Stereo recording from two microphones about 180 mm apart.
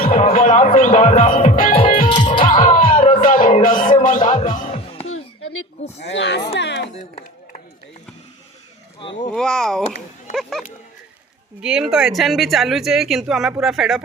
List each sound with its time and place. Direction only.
0.3 s speech: 45° left (ahead or behind)
1.7 s music: 30° left (ahead or behind)
2.4 s music: 45° left (ahead or behind)
6.1 s speech: 85° left
6.9 s chop: 35° left (ahead or behind)
9.3 s speech: 5° left (ahead or behind)